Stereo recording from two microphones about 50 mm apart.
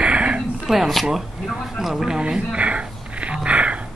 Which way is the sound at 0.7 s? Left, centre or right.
Centre.